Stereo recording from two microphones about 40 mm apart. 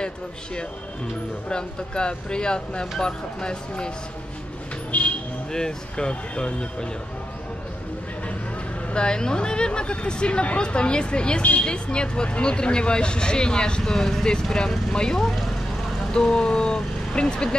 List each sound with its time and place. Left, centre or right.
1.5 s speech: left
4.9 s a sound: left
5.5 s speech: centre
8.9 s speech: left
13.9 s speech: centre
14.2 s speech: centre
16.1 s speech: centre